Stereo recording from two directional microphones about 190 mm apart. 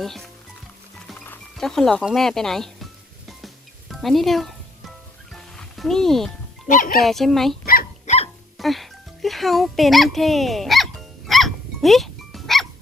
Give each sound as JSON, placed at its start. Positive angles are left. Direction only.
{"t": 0.0, "sound": "speech", "side_deg": 0}
{"t": 1.3, "sound": "speech", "side_deg": 0}
{"t": 3.2, "sound": "music", "side_deg": 0}
{"t": 6.7, "sound": "speech", "side_deg": 45}
{"t": 7.0, "sound": "speech", "side_deg": 0}
{"t": 7.6, "sound": "dog", "side_deg": 50}
{"t": 8.5, "sound": "speech", "side_deg": 0}
{"t": 11.3, "sound": "dog", "side_deg": 0}